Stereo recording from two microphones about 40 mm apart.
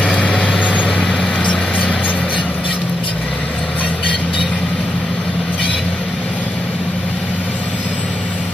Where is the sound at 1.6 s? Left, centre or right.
Centre.